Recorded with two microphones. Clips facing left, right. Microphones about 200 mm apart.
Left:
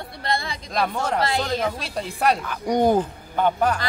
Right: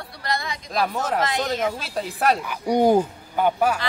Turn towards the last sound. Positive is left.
turn(degrees=-10)  # may be behind; listen again after turning